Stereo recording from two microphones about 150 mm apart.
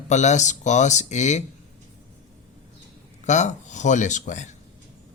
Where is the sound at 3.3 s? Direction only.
55° left (ahead or behind).